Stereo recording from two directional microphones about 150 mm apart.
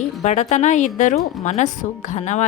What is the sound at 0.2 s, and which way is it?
A woman's voice, 50° left (ahead or behind).